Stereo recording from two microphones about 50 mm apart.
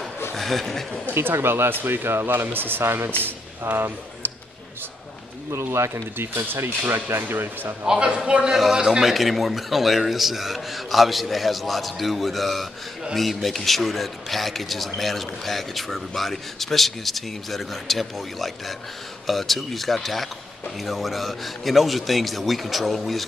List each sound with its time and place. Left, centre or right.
0.4 s speech: centre
1.1 s speech: right
5.5 s speech: right
6.4 s speech: right
7.8 s a man's voice: centre
9.1 s a man's voice: centre